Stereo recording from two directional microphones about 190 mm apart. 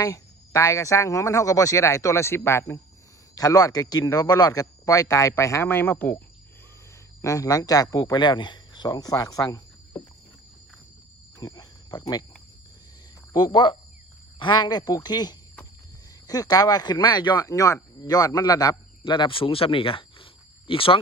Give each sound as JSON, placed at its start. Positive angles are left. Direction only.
{"t": 0.0, "sound": "a man's voice", "side_deg": 15}
{"t": 11.3, "sound": "speech", "side_deg": 20}
{"t": 13.3, "sound": "speech", "side_deg": 25}